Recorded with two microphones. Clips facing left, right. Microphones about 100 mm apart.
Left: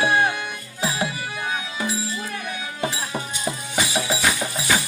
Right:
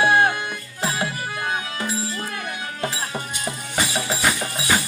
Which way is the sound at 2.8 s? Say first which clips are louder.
Left 1 dB; 5° left (ahead or behind).